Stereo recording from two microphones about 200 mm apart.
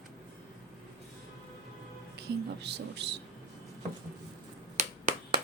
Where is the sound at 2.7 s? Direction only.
55° right (ahead or behind).